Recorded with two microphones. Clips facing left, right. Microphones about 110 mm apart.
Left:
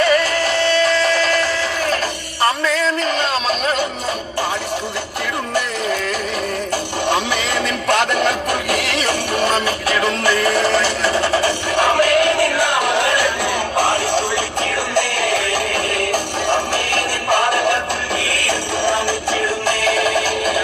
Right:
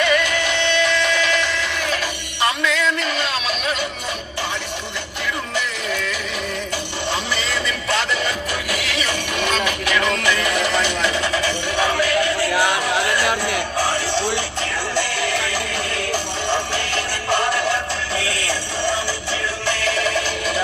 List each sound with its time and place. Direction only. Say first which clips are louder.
0.0 s music: left 3 dB; 40° left (ahead or behind)
7.1 s music: left 5 dB; 55° left (ahead or behind); by 11.5 s 35° left (ahead or behind)
11.8 s music: left 5 dB; 50° left (ahead or behind)
18.9 s music: left 5 dB; 50° left (ahead or behind)